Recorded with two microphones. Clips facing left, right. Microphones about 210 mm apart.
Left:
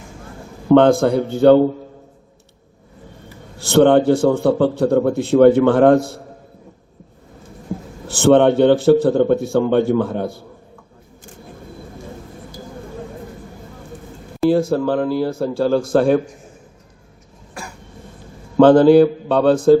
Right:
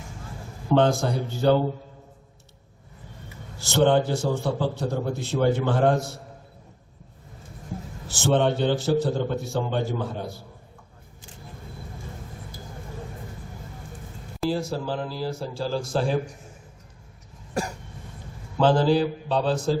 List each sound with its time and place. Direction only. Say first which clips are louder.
0.7 s a man's voice: left 10 dB; 55° left (ahead or behind)
3.6 s a man's voice: left 8 dB; 55° left (ahead or behind)
8.0 s a man's voice: left 10 dB; 55° left (ahead or behind)
14.5 s a man's voice: left 13 dB; 55° left (ahead or behind)
17.5 s cough: right 6 dB; 40° right (ahead or behind)
18.5 s a man's voice: left 11 dB; 60° left (ahead or behind)